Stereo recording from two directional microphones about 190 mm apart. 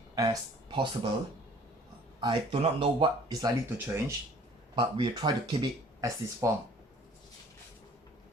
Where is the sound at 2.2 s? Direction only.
25° right (ahead or behind).